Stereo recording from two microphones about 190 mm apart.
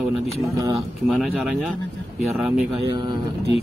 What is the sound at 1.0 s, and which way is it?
Speech, centre (ahead or behind).